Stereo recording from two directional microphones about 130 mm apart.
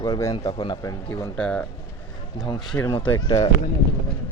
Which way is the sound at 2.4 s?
35° left (ahead or behind).